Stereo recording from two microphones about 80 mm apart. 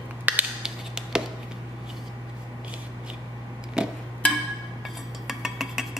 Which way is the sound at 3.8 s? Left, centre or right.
Centre.